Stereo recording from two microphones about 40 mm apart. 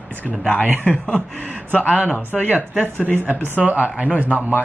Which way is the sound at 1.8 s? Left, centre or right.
Left.